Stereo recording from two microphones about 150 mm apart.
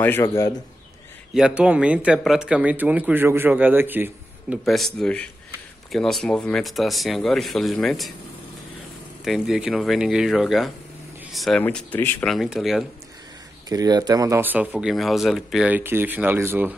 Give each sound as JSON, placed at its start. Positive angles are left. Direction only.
{"t": 0.0, "sound": "speech", "side_deg": 15}
{"t": 1.3, "sound": "speech", "side_deg": -5}
{"t": 4.6, "sound": "speech", "side_deg": 0}
{"t": 9.2, "sound": "speech", "side_deg": -5}
{"t": 11.6, "sound": "speech", "side_deg": 10}
{"t": 12.3, "sound": "speech", "side_deg": 0}
{"t": 13.7, "sound": "speech", "side_deg": -25}